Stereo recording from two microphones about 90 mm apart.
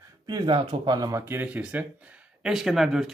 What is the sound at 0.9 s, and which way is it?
Speech, 45° right (ahead or behind).